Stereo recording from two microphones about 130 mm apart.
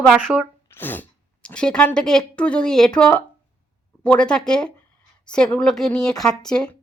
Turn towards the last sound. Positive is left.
turn(degrees=5)  # may be behind; listen again after turning